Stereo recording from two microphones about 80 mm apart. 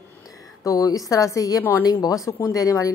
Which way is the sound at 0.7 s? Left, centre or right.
Left.